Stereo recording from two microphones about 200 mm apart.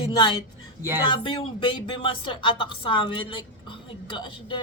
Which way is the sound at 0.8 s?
10° right (ahead or behind).